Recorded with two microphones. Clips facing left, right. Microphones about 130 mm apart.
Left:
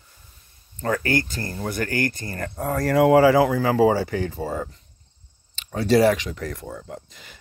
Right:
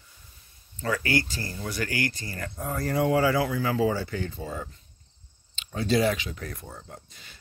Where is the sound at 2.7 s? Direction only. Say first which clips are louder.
Left 8 dB; 75° left (ahead or behind).